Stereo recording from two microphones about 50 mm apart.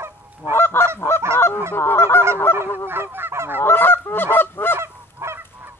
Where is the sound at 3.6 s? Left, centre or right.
Left.